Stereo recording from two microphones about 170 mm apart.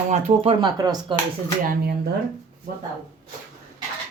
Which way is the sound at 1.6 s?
60° right (ahead or behind).